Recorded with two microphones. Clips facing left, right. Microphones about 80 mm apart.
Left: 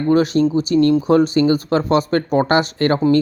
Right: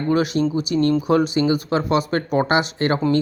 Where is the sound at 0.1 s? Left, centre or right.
Left.